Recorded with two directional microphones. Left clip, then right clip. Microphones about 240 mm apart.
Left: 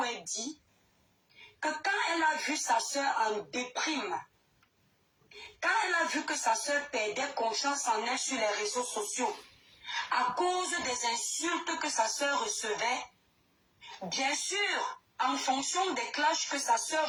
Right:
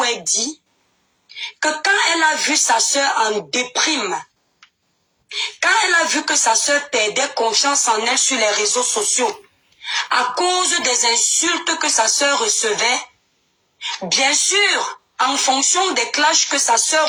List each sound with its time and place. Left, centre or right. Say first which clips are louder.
0.0 s a sound: right 16 dB; right
1.5 s speech: right 15 dB; right
5.4 s speech: right 14 dB; right